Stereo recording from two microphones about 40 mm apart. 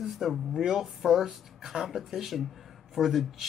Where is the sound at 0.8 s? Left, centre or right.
Centre.